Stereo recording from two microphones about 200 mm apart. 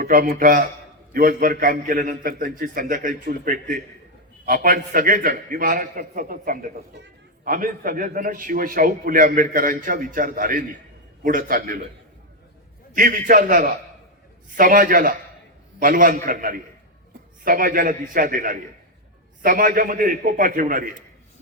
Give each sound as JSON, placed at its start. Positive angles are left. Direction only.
{"t": 0.0, "sound": "a man's voice", "side_deg": -45}
{"t": 12.9, "sound": "a man's voice", "side_deg": -45}